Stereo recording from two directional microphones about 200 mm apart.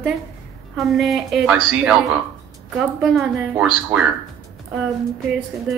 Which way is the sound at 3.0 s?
5° right (ahead or behind).